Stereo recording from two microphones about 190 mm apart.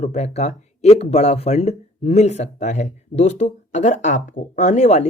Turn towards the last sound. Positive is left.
turn(degrees=35)  # may be behind; listen again after turning